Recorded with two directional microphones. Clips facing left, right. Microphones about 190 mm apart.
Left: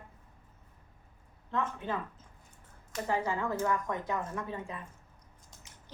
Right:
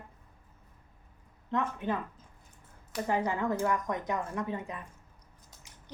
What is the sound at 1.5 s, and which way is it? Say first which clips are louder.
Speech: right 3 dB; 15° right (ahead or behind).